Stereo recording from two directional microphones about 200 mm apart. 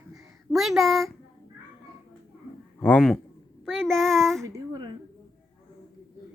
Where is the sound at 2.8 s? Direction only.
5° left (ahead or behind).